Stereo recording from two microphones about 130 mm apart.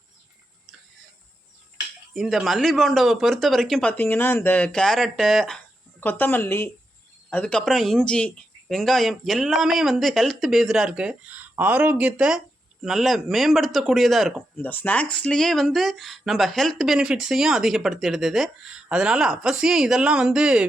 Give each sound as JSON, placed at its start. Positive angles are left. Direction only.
{"t": 2.1, "sound": "speech", "side_deg": 0}
{"t": 6.0, "sound": "speech", "side_deg": 15}
{"t": 14.6, "sound": "speech", "side_deg": 15}